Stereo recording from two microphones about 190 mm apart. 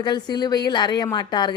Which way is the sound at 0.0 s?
20° left (ahead or behind).